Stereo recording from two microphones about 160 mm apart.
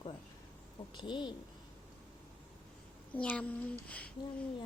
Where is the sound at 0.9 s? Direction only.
30° left (ahead or behind).